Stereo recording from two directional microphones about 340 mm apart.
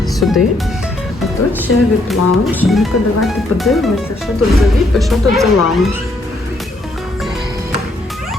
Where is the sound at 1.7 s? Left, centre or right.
Left.